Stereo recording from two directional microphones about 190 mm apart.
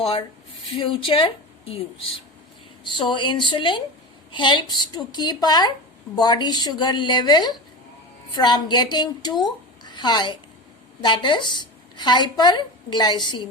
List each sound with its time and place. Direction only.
0.0 s a woman's voice: 30° left (ahead or behind)
2.8 s a woman's voice: 25° left (ahead or behind)